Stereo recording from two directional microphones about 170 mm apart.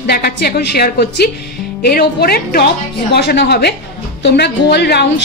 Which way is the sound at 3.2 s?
80° left.